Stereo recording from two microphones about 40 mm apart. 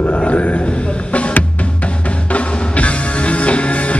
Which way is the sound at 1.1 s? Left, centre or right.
Left.